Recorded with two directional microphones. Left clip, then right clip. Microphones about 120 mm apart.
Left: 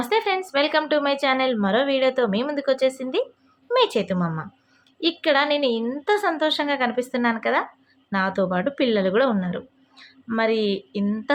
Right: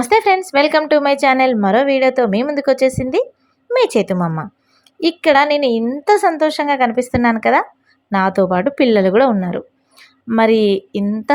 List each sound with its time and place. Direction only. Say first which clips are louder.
0.0 s a woman's voice: right 9 dB; 60° right (ahead or behind)